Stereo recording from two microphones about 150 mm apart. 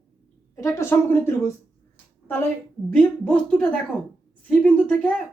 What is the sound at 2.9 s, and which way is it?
A woman's voice, 5° left (ahead or behind).